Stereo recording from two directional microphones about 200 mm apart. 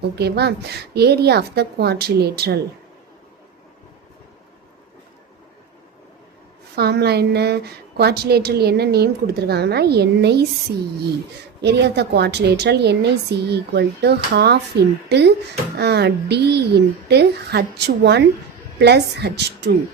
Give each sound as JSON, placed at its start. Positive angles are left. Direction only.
{"t": 0.2, "sound": "a woman's voice", "side_deg": -55}
{"t": 6.7, "sound": "a woman's voice", "side_deg": -55}
{"t": 11.6, "sound": "a woman's voice", "side_deg": -55}